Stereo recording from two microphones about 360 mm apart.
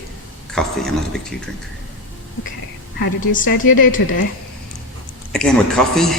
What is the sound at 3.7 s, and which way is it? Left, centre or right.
Speech, left.